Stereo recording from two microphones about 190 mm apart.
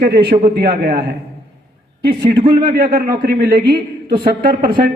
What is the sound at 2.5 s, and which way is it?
A man's voice, 50° right (ahead or behind).